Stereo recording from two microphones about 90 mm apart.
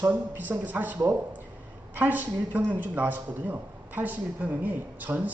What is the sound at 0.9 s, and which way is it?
Speech, 35° right (ahead or behind).